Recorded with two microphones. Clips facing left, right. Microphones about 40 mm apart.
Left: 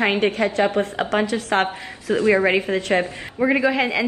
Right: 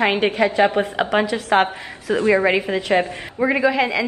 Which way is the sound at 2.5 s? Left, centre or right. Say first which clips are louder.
Right 1 dB; centre.